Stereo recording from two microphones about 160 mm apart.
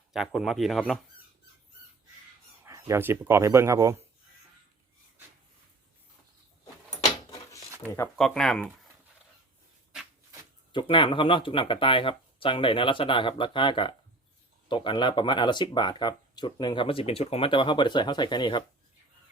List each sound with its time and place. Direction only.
0.1 s speech: centre (ahead or behind)
2.6 s speech: 20° right (ahead or behind)
7.9 s speech: 15° left (ahead or behind)
8.2 s speech: 5° left (ahead or behind)
10.7 s speech: 30° left (ahead or behind)